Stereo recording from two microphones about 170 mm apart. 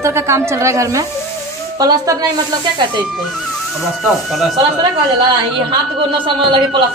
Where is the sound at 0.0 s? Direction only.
15° right (ahead or behind).